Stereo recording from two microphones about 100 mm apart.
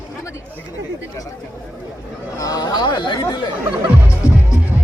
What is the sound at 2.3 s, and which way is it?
Speech, 35° left (ahead or behind).